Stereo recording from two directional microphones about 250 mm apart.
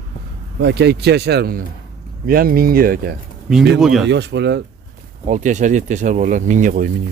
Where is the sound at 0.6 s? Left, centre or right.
Right.